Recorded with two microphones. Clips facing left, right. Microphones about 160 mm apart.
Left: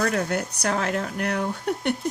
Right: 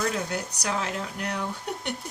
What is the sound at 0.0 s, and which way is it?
Speech, 60° left (ahead or behind).